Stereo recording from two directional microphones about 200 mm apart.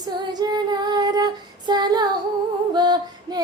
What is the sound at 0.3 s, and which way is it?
Child singing, 20° right (ahead or behind).